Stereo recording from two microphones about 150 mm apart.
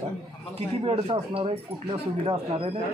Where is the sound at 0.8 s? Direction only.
40° right (ahead or behind).